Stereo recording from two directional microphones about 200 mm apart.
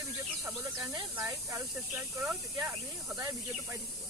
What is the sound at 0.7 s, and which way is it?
Speech, 15° right (ahead or behind).